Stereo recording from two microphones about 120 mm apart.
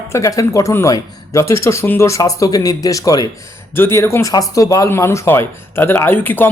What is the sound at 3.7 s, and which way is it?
A man's voice, 20° left (ahead or behind).